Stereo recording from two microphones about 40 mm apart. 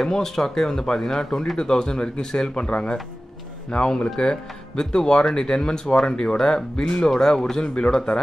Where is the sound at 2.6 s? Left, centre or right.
Left.